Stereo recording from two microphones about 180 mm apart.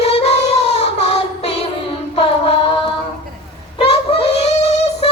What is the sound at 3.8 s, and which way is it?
Child singing, 30° left (ahead or behind).